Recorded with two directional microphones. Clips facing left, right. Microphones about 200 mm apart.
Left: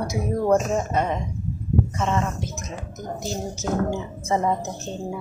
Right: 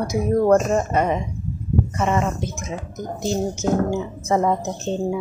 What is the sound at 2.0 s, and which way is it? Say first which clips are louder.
Speech: right 6 dB; 10° right (ahead or behind).